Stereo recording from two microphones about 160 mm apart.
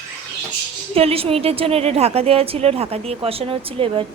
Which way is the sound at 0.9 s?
35° right (ahead or behind).